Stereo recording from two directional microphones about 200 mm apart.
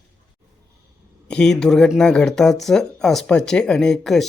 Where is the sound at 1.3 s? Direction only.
5° left (ahead or behind).